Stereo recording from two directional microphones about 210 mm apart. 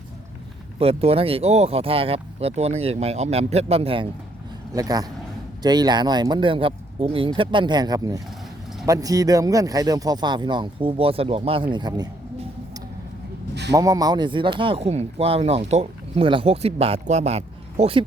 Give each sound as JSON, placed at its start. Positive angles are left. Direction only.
{"t": 0.8, "sound": "speech", "side_deg": -25}
{"t": 13.7, "sound": "speech", "side_deg": -15}